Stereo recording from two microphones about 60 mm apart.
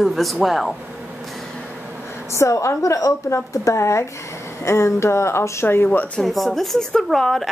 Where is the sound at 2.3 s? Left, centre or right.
Left.